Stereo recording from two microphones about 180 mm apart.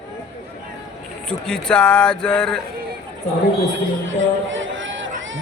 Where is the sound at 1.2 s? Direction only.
5° left (ahead or behind).